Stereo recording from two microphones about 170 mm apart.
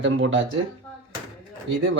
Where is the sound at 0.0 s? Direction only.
90° right.